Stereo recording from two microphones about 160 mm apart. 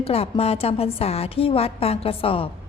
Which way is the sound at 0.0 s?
40° left (ahead or behind).